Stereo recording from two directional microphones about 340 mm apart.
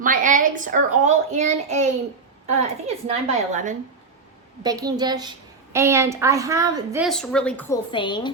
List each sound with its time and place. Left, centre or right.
0.0 s a child's voice: right
4.6 s a woman's voice: centre